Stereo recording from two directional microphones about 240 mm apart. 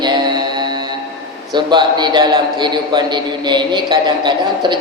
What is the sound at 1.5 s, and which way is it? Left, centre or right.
A man's voice, centre.